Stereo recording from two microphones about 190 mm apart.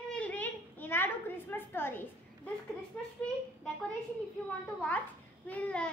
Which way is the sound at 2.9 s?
10° left (ahead or behind).